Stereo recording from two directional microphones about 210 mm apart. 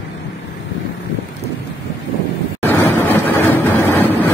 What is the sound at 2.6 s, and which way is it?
Vehicle, 10° left (ahead or behind).